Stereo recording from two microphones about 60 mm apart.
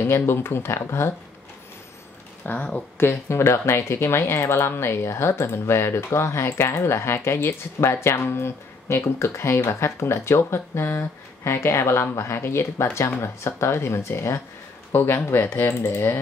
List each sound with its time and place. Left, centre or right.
0.0 s speech: left
2.4 s speech: left
3.0 s speech: left
14.9 s speech: left